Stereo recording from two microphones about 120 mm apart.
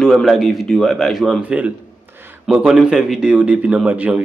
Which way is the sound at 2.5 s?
5° right (ahead or behind).